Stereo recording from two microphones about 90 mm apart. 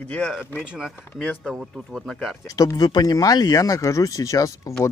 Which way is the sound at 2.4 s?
40° left (ahead or behind).